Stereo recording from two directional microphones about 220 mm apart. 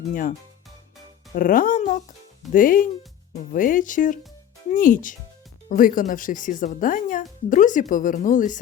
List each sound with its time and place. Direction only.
0.1 s speech: 40° left (ahead or behind)
1.4 s speech: 40° left (ahead or behind)